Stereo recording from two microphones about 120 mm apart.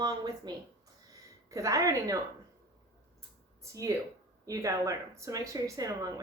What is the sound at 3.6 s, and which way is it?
A woman's voice, 25° right (ahead or behind).